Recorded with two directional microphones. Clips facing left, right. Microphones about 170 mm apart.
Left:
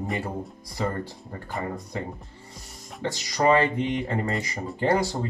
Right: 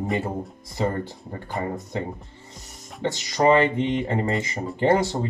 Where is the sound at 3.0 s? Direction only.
20° right (ahead or behind).